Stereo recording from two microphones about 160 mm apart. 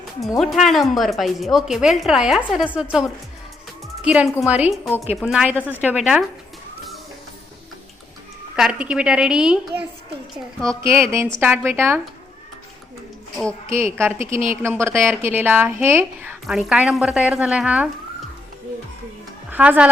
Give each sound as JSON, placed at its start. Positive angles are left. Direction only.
{"t": 0.3, "sound": "speech", "side_deg": 0}
{"t": 4.0, "sound": "a woman's voice", "side_deg": -5}
{"t": 8.5, "sound": "speech", "side_deg": -5}
{"t": 10.8, "sound": "a woman's voice", "side_deg": -15}
{"t": 13.7, "sound": "a woman's voice", "side_deg": -15}
{"t": 16.5, "sound": "speech", "side_deg": -5}
{"t": 19.5, "sound": "a woman's voice", "side_deg": -10}